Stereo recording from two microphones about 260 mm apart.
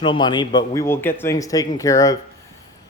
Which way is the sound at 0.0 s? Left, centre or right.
Centre.